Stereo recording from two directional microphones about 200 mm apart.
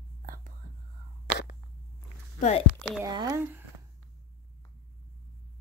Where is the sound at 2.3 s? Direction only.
35° left (ahead or behind).